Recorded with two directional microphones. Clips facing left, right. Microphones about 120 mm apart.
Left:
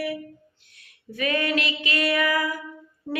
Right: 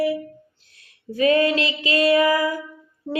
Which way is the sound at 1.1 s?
30° right (ahead or behind).